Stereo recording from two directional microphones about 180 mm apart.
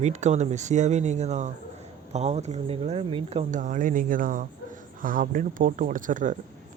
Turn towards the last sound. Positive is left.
turn(degrees=-45)  # may be behind; listen again after turning